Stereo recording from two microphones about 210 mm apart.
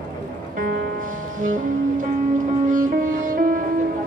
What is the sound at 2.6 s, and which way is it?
Music, 40° right (ahead or behind).